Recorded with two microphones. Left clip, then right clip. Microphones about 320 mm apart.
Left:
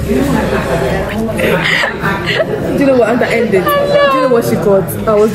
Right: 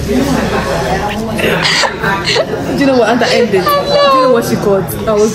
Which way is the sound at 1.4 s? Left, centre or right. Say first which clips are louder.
Right 1 dB; centre.